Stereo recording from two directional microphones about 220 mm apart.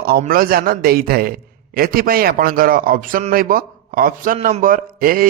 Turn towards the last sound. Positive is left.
turn(degrees=-40)  # may be behind; listen again after turning